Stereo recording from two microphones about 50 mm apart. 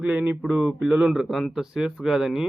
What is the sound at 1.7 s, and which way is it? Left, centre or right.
Speech, centre.